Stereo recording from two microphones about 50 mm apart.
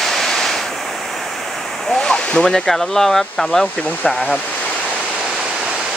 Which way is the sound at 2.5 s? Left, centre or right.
Centre.